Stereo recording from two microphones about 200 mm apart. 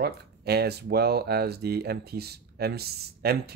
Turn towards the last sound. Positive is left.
turn(degrees=-50)  # may be behind; listen again after turning